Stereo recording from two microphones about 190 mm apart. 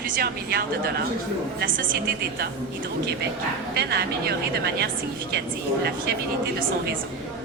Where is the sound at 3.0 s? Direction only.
60° right (ahead or behind).